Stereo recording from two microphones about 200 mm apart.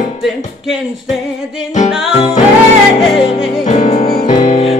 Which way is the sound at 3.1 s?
25° left (ahead or behind).